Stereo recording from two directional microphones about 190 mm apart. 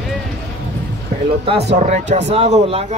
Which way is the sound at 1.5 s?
35° right (ahead or behind).